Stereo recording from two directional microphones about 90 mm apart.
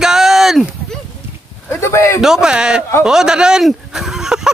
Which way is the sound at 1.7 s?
30° left (ahead or behind).